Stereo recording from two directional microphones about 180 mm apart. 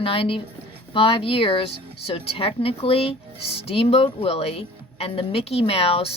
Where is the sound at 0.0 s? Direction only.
30° left (ahead or behind).